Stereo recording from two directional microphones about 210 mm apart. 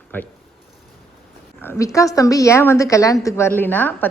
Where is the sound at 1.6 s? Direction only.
10° left (ahead or behind).